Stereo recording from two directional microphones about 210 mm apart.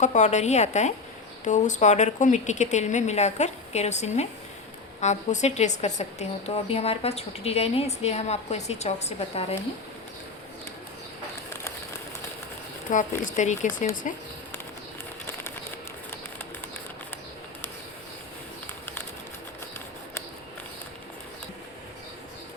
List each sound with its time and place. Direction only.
0.0 s a woman's voice: 35° left (ahead or behind)
12.9 s speech: 35° left (ahead or behind)